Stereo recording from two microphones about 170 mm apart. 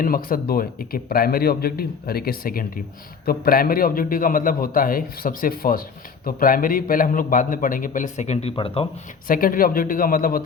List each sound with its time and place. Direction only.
0.0 s a man's voice: 55° left (ahead or behind); by 8.9 s 35° left (ahead or behind)
9.2 s a man's voice: 55° left (ahead or behind)